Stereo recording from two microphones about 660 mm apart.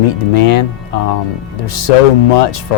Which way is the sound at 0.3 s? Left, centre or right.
Left.